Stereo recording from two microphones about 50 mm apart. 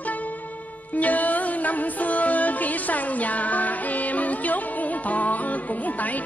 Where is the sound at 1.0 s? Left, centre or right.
Left.